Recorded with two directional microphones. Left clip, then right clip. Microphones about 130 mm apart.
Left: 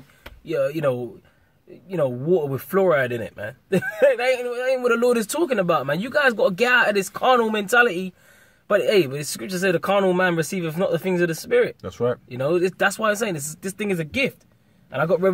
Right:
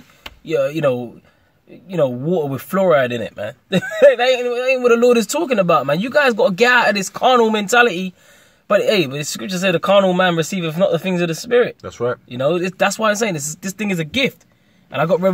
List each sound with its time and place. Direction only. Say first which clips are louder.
0.5 s speech: right 5 dB; 30° right (ahead or behind)
11.8 s speech: right 2 dB; 35° left (ahead or behind)
12.3 s speech: right 3 dB; 25° right (ahead or behind)